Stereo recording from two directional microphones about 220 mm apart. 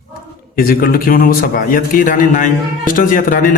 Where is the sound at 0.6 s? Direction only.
40° left (ahead or behind).